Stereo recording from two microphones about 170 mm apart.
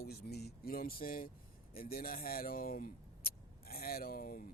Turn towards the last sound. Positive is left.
turn(degrees=60)  # may be behind; listen again after turning